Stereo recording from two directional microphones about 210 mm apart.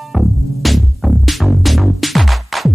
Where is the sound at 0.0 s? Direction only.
Centre (ahead or behind).